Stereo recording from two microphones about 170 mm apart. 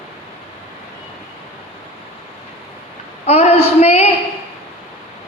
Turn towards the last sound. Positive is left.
turn(degrees=40)  # may be behind; listen again after turning